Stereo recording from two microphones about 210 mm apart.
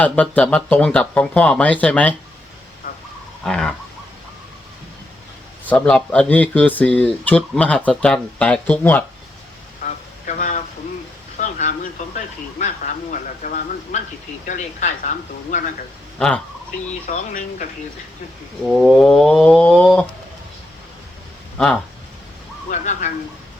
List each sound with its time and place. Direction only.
0.0 s speech: 5° left (ahead or behind)
2.8 s fowl: 45° left (ahead or behind)
3.4 s speech: 5° left (ahead or behind)
5.6 s speech: 5° left (ahead or behind)
9.8 s a sound: 40° left (ahead or behind)
11.3 s speech: 35° left (ahead or behind)
16.1 s speech: 5° left (ahead or behind)
17.1 s speech: 40° left (ahead or behind)
18.6 s speech: centre (ahead or behind)
22.7 s speech: 35° left (ahead or behind)